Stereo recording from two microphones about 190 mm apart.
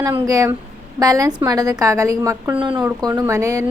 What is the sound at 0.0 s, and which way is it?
A woman's voice, 20° right (ahead or behind).